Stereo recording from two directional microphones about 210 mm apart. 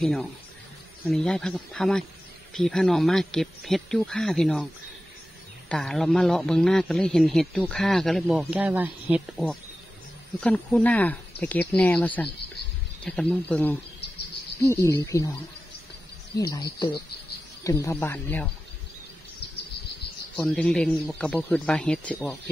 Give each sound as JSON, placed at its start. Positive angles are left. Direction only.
{"t": 0.0, "sound": "a man's voice", "side_deg": 0}
{"t": 5.7, "sound": "a man's voice", "side_deg": 5}
{"t": 10.4, "sound": "speech", "side_deg": 5}
{"t": 16.3, "sound": "speech", "side_deg": 15}
{"t": 17.6, "sound": "speech", "side_deg": 15}
{"t": 20.3, "sound": "a man's voice", "side_deg": 5}